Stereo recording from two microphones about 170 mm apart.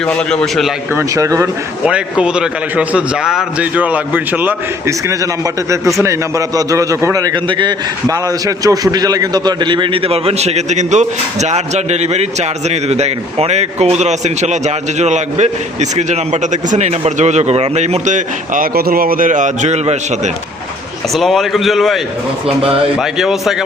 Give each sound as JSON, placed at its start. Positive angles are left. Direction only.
{"t": 0.0, "sound": "a man's voice", "side_deg": 5}
{"t": 0.9, "sound": "speech", "side_deg": -20}
{"t": 1.8, "sound": "a man's voice", "side_deg": -5}
{"t": 21.1, "sound": "a man's voice", "side_deg": 0}